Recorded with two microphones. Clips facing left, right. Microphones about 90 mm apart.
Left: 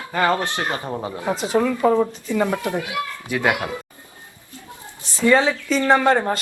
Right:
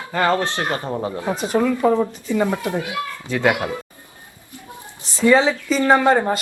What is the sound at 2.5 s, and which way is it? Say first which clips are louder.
Speech: right 1 dB; 20° right (ahead or behind).